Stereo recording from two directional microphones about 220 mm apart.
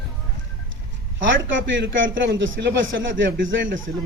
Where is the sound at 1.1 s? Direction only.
60° right (ahead or behind).